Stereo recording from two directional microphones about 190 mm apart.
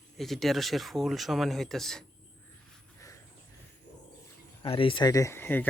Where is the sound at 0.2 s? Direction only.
Centre (ahead or behind).